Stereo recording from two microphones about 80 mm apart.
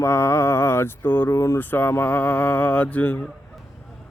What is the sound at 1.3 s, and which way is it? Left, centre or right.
Speech, left.